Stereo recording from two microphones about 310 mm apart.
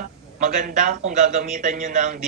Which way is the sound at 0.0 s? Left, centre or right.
Right.